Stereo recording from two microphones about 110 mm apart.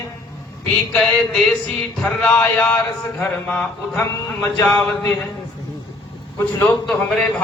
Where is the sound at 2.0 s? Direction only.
10° left (ahead or behind).